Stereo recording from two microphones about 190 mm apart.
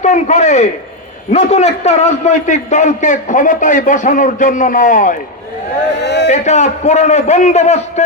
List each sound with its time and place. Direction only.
0.0 s a man's voice: 40° left (ahead or behind)
6.2 s a man's voice: 35° left (ahead or behind)